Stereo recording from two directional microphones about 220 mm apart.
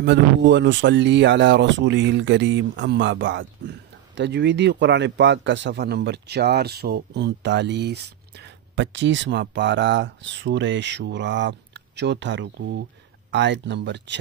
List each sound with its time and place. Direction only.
0.0 s speech: 55° right (ahead or behind)